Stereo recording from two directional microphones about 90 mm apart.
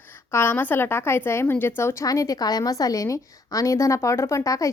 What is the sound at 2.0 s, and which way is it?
A woman's voice, 40° left (ahead or behind).